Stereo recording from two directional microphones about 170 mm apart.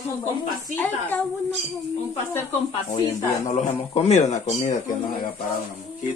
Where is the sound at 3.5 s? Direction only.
40° left (ahead or behind).